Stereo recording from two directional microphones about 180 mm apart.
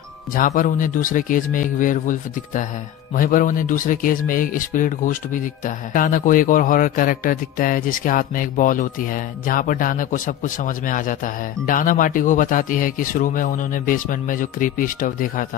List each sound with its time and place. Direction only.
0.3 s speech: 50° left (ahead or behind)